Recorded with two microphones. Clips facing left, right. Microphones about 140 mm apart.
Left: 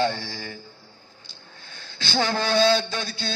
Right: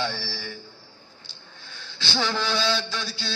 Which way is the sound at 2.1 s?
50° left (ahead or behind).